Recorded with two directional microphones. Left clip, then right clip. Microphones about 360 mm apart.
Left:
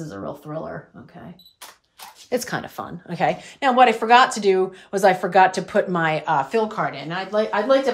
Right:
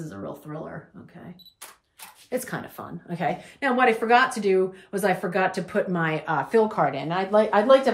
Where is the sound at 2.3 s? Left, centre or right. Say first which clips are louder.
Left 5 dB; left; by 7.8 s centre.